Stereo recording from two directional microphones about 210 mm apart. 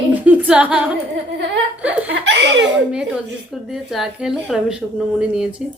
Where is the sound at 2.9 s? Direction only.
5° right (ahead or behind).